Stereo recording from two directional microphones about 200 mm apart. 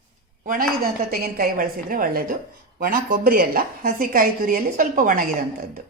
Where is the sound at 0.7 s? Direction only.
45° right (ahead or behind).